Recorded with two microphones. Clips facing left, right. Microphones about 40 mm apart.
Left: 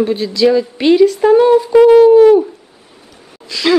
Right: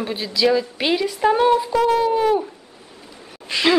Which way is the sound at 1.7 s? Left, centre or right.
Left.